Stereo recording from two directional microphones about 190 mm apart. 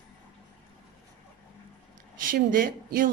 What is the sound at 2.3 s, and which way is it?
Speech, 45° right (ahead or behind).